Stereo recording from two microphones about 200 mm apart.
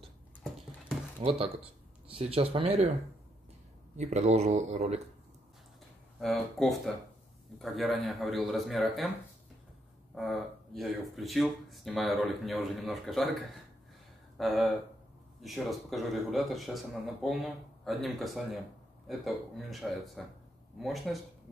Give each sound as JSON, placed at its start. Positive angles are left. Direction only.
{"t": 1.2, "sound": "speech", "side_deg": -30}
{"t": 3.9, "sound": "speech", "side_deg": -35}
{"t": 6.1, "sound": "speech", "side_deg": 0}
{"t": 10.1, "sound": "speech", "side_deg": 0}
{"t": 14.4, "sound": "speech", "side_deg": 0}